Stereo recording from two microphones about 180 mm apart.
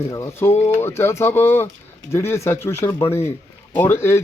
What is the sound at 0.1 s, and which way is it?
Speech, 15° left (ahead or behind).